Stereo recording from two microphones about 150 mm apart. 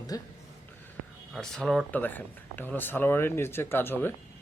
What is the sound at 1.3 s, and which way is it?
Speech, 5° left (ahead or behind).